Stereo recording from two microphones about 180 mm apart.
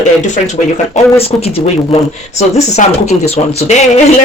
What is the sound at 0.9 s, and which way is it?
Speech, 35° left (ahead or behind).